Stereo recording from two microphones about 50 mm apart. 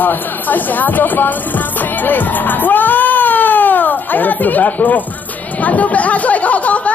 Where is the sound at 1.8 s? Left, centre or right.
Left.